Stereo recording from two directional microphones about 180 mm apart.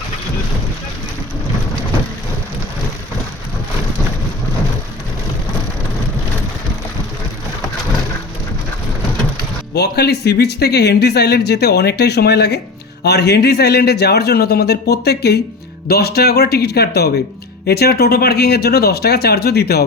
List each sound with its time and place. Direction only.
9.7 s speech: 65° left (ahead or behind)